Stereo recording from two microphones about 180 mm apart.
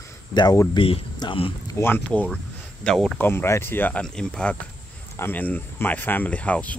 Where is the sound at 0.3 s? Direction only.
20° left (ahead or behind).